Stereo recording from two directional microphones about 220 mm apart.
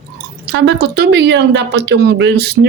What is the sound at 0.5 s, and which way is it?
A woman's voice, 50° right (ahead or behind).